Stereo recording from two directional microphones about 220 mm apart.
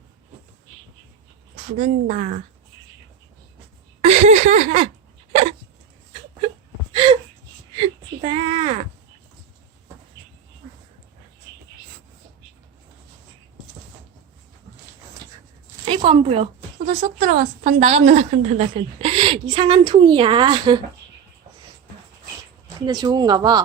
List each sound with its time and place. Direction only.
1.7 s speech: 30° right (ahead or behind)
4.0 s a sound: 30° right (ahead or behind)
5.3 s hiccup: 30° right (ahead or behind)
6.9 s gasp: 20° right (ahead or behind)
7.8 s a sound: 25° right (ahead or behind)
15.9 s a woman's voice: 25° right (ahead or behind)
22.9 s speech: 20° right (ahead or behind)